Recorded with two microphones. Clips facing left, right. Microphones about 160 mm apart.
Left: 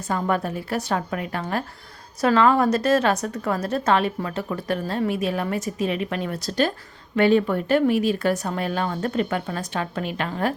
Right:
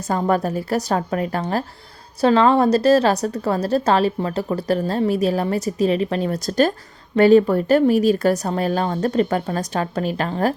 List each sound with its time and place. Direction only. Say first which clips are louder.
0.1 s a woman's voice: right 4 dB; 40° right (ahead or behind)